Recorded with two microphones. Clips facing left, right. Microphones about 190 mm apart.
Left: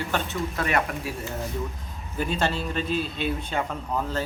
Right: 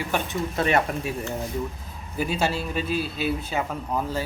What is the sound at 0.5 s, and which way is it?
Speech, 25° right (ahead or behind).